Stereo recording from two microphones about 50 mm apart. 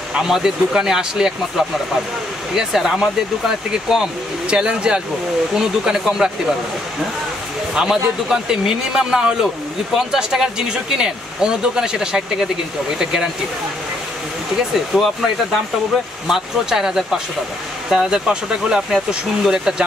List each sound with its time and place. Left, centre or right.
0.2 s speech: centre
2.5 s speech: centre
7.7 s speech: centre
14.7 s speech: centre
18.3 s speech: centre